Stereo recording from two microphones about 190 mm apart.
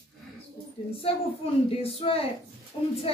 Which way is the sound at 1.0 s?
30° left (ahead or behind).